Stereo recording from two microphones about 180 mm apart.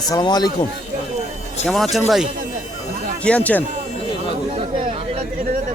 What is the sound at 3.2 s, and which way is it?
Speech, 5° left (ahead or behind).